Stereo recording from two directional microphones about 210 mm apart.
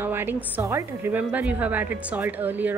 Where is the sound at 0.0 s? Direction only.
10° right (ahead or behind).